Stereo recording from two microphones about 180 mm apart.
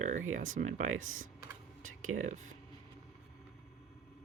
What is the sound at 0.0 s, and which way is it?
Speech, 45° right (ahead or behind).